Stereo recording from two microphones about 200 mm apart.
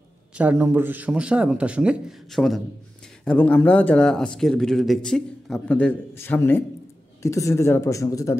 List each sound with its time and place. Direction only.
0.4 s a man's voice: 10° right (ahead or behind); by 8.4 s 15° left (ahead or behind)